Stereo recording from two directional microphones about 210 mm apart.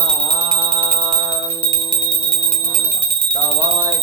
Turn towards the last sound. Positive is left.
turn(degrees=-20)  # may be behind; listen again after turning